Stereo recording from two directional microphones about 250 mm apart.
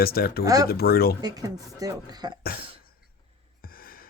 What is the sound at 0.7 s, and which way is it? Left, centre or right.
Speech, left.